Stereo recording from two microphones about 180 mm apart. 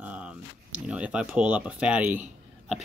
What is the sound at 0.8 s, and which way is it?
Speech, 5° right (ahead or behind).